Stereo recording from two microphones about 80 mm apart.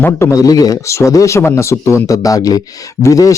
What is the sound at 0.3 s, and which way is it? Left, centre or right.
Speech, left.